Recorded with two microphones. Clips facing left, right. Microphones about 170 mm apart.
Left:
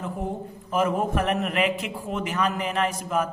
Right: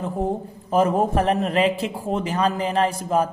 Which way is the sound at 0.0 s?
35° right (ahead or behind).